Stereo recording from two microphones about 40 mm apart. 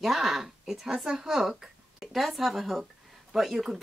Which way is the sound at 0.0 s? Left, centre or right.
Centre.